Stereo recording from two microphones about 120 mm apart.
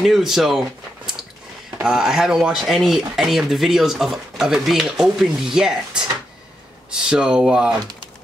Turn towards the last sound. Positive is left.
turn(degrees=-5)  # may be behind; listen again after turning